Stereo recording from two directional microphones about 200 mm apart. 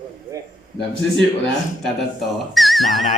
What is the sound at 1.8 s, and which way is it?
Speech, centre (ahead or behind).